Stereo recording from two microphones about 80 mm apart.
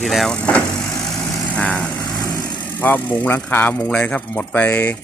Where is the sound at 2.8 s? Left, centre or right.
Left.